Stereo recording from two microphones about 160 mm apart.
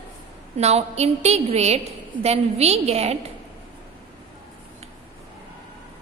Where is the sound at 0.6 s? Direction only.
40° right (ahead or behind).